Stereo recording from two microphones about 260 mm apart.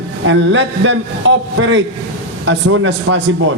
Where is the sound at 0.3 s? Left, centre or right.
Right.